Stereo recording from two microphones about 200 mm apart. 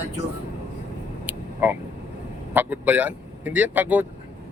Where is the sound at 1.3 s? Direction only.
10° right (ahead or behind).